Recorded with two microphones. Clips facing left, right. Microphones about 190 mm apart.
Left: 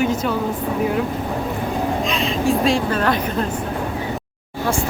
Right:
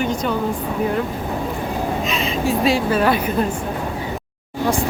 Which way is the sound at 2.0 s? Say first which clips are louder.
Left 1 dB; centre (ahead or behind).